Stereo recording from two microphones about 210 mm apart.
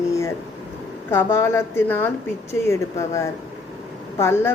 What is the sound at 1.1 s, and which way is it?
Speech, 10° left (ahead or behind).